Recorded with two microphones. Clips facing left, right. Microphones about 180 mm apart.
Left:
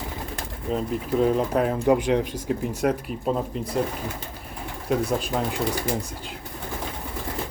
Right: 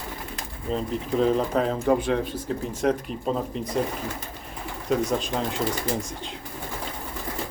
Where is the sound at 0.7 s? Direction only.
5° left (ahead or behind).